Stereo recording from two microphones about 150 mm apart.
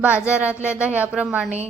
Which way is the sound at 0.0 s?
10° right (ahead or behind).